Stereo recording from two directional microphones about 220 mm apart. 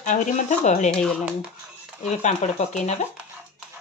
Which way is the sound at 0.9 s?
5° left (ahead or behind).